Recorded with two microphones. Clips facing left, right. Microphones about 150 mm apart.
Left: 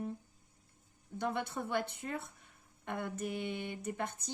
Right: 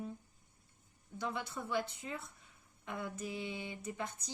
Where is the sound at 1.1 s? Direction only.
55° left (ahead or behind).